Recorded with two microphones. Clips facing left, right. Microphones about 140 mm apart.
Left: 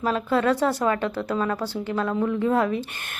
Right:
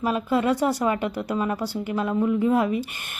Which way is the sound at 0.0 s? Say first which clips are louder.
Even; 10° right (ahead or behind).